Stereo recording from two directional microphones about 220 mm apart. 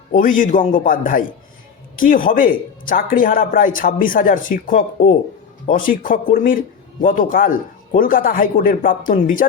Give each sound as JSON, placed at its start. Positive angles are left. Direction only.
{"t": 0.1, "sound": "a man's voice", "side_deg": 35}